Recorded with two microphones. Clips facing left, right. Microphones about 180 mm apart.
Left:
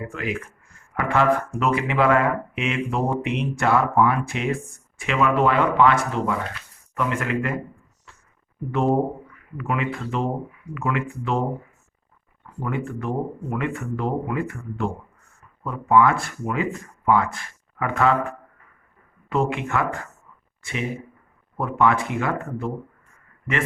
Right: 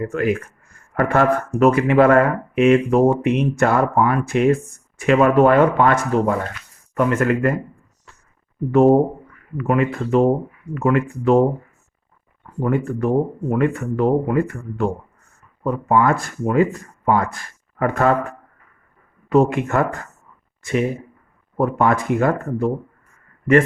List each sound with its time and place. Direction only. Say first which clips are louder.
0.0 s speech: right 8 dB; 45° right (ahead or behind)
8.7 s speech: right 8 dB; 45° right (ahead or behind)
12.6 s speech: right 8 dB; 40° right (ahead or behind)
19.3 s speech: right 7 dB; 40° right (ahead or behind)
21.6 s speech: right 3 dB; 40° right (ahead or behind)